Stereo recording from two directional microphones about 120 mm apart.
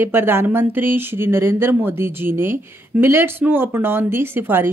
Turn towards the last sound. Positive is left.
turn(degrees=-20)  # may be behind; listen again after turning